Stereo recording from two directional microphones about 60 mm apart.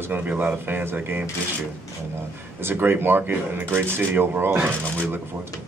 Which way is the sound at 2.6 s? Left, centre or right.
Right.